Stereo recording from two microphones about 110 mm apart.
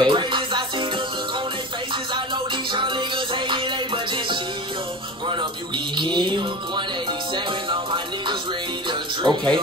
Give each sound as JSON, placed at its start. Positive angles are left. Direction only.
{"t": 0.0, "sound": "music", "side_deg": -45}
{"t": 2.1, "sound": "music", "side_deg": -45}
{"t": 5.9, "sound": "music", "side_deg": -45}
{"t": 9.2, "sound": "speech", "side_deg": -40}